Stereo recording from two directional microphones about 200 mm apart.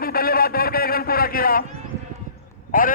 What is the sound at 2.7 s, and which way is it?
Speech, 45° left (ahead or behind).